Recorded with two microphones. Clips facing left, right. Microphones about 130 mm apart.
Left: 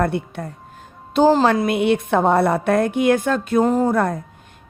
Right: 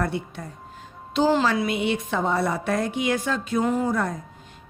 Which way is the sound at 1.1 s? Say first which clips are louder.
Left 6 dB; 45° left (ahead or behind).